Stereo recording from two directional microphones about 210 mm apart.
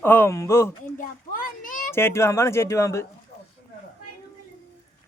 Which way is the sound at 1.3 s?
40° left (ahead or behind).